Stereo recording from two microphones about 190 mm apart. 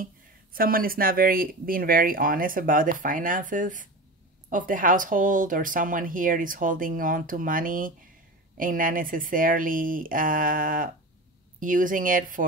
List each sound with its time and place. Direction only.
0.0 s speech: 50° right (ahead or behind)